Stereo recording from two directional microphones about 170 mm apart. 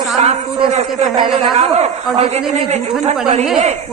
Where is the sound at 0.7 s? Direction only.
40° right (ahead or behind).